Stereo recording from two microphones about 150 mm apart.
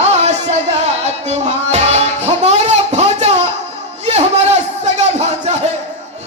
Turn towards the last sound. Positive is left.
turn(degrees=-45)  # may be behind; listen again after turning